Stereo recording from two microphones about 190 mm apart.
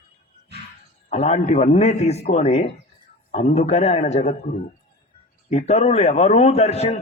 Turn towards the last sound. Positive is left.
turn(degrees=35)  # may be behind; listen again after turning